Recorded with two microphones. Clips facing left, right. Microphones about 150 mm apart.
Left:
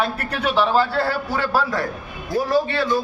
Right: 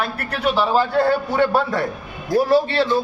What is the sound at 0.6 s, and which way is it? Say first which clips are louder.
A man's voice: right 5 dB; 15° right (ahead or behind).